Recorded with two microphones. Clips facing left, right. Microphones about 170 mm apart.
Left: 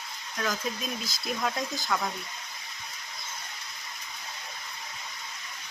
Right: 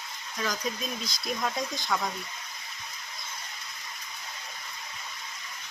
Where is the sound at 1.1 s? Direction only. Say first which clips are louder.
Left 1 dB; centre (ahead or behind).